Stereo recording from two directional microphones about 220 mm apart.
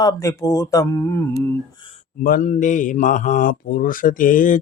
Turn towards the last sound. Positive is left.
turn(degrees=35)  # may be behind; listen again after turning